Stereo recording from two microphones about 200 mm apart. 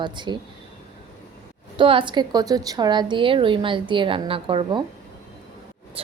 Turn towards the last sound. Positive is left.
turn(degrees=-30)  # may be behind; listen again after turning